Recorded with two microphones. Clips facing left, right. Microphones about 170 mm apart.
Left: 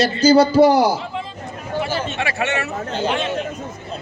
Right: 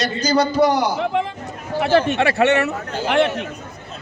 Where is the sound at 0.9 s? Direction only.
65° right (ahead or behind).